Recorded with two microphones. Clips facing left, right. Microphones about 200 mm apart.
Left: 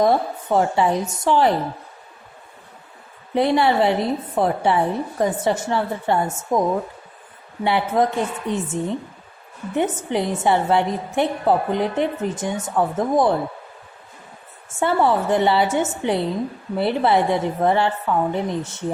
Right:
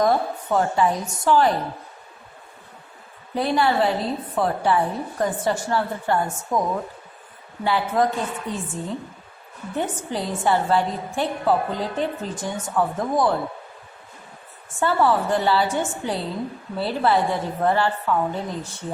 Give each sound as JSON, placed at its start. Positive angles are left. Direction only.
{"t": 0.0, "sound": "a woman's voice", "side_deg": 25}
{"t": 3.3, "sound": "a woman's voice", "side_deg": 25}
{"t": 7.6, "sound": "a woman's voice", "side_deg": 25}
{"t": 14.8, "sound": "a woman's voice", "side_deg": 20}